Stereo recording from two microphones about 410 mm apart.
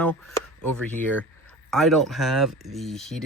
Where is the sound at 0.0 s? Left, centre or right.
Centre.